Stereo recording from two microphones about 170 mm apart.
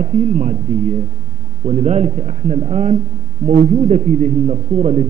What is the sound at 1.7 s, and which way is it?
A man's voice, 40° right (ahead or behind).